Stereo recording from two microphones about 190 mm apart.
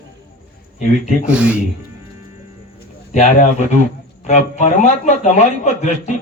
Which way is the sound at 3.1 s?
40° left (ahead or behind).